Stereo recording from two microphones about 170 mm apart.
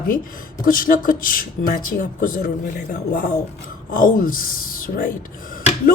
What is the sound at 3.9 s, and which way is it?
Speech, 55° left (ahead or behind).